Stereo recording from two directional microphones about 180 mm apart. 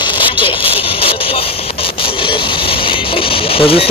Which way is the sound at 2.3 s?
30° left (ahead or behind).